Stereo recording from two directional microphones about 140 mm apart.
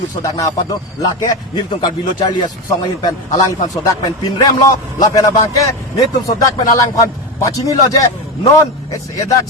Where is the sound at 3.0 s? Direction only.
30° left (ahead or behind).